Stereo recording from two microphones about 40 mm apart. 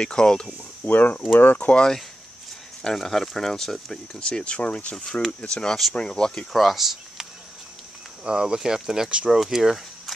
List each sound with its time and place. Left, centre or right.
0.0 s speech: centre
0.8 s speech: left
1.6 s speech: left
2.8 s speech: centre
4.2 s speech: left
6.5 s speech: centre
8.2 s speech: right